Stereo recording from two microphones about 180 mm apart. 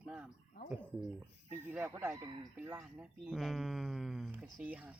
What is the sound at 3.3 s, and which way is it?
Speech, centre (ahead or behind).